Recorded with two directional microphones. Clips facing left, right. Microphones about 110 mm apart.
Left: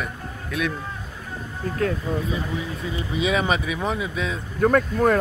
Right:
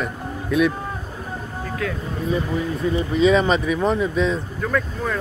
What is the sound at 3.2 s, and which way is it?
Speech, 10° left (ahead or behind).